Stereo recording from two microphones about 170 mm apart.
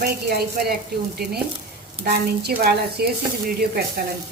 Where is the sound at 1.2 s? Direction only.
70° right (ahead or behind).